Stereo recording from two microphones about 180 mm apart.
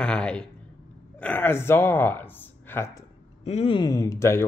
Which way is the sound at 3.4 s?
35° left (ahead or behind).